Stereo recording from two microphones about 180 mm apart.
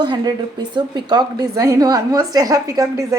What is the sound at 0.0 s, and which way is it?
A woman's voice, 25° right (ahead or behind).